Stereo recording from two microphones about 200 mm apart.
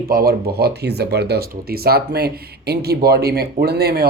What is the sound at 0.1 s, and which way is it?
Speech, 50° right (ahead or behind).